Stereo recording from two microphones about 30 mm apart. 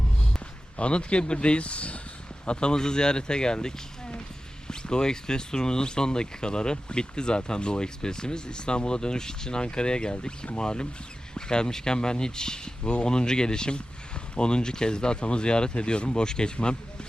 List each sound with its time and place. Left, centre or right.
0.8 s speech: left
2.5 s speech: left